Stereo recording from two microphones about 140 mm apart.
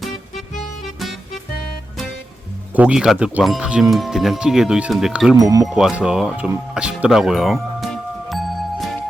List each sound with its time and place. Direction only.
0.3 s music: 65° left (ahead or behind)
0.9 s music: centre (ahead or behind)
2.7 s speech: 5° right (ahead or behind)
5.4 s speech: 25° right (ahead or behind)
5.6 s speech: 5° right (ahead or behind)
6.7 s music: 5° right (ahead or behind)